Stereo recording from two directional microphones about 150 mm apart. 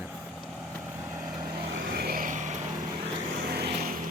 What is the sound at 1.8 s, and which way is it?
Vehicle, 85° right.